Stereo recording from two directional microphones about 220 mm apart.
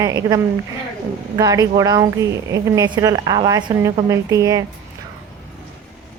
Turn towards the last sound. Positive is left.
turn(degrees=-15)  # may be behind; listen again after turning